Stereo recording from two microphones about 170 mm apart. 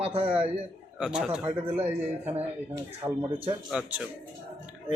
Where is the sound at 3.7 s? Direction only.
5° right (ahead or behind).